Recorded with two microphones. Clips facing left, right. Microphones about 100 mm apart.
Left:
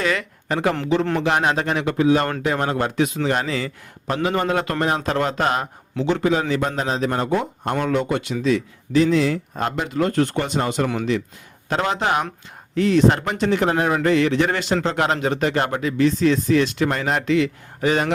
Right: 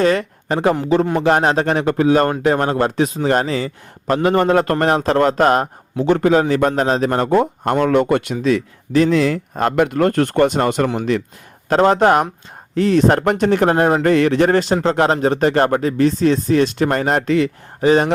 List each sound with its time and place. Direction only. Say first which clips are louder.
0.0 s speech: right 7 dB; 35° right (ahead or behind)
4.1 s a man's voice: right 6 dB; 50° right (ahead or behind)
17.7 s speech: right 6 dB; 30° right (ahead or behind)